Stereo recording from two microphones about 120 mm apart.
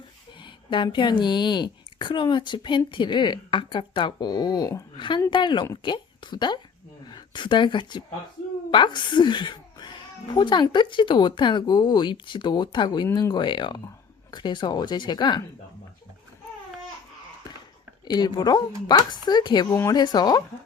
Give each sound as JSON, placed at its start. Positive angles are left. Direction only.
{"t": 0.3, "sound": "a woman's voice", "side_deg": 45}
{"t": 18.0, "sound": "speech", "side_deg": 35}